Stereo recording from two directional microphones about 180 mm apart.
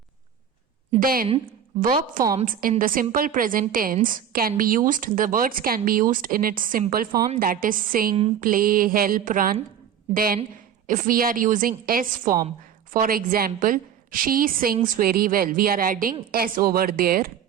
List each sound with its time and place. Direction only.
0.9 s a woman's voice: 55° right (ahead or behind)